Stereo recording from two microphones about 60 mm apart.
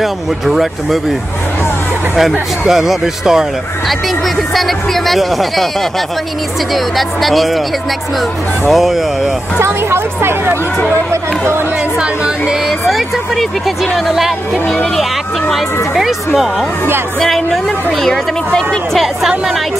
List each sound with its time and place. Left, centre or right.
0.0 s speech: centre
2.7 s speech: centre
4.6 s speech: centre
6.7 s speech: centre
8.6 s speech: centre
9.6 s speech: right
12.8 s speech: centre
17.2 s a woman's voice: centre